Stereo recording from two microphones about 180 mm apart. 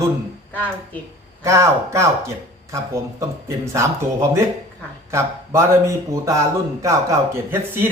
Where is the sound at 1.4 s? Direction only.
15° right (ahead or behind).